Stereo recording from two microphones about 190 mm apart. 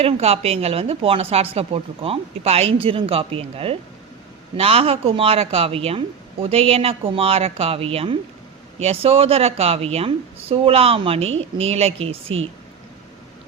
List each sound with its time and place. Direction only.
0.0 s a woman's voice: 30° right (ahead or behind)